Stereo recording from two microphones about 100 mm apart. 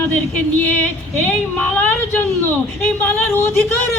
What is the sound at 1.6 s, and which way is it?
Speech, 15° left (ahead or behind).